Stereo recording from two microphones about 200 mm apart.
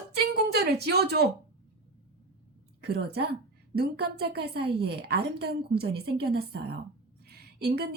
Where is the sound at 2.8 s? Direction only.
55° right (ahead or behind).